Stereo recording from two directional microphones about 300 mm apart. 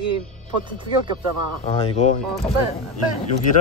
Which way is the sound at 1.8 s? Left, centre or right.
Centre.